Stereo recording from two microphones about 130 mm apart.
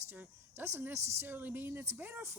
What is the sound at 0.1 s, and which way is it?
Speech, 15° right (ahead or behind).